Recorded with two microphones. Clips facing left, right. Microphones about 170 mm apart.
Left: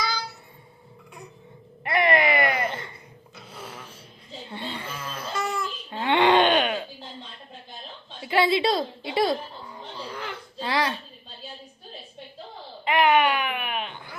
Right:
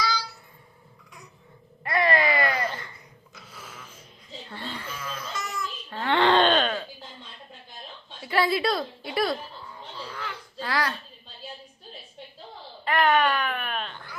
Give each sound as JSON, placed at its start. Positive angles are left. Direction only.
{"t": 0.0, "sound": "child singing", "side_deg": 20}
{"t": 1.8, "sound": "a sound", "side_deg": 20}
{"t": 4.4, "sound": "a sound", "side_deg": 20}
{"t": 5.4, "sound": "babbling", "side_deg": 30}
{"t": 5.9, "sound": "wail", "side_deg": 20}
{"t": 8.2, "sound": "a woman's voice", "side_deg": 25}
{"t": 10.1, "sound": "baby cry", "side_deg": 20}
{"t": 12.8, "sound": "baby cry", "side_deg": 15}